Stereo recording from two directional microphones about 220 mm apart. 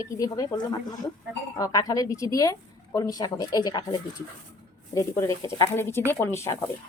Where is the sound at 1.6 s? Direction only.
15° left (ahead or behind).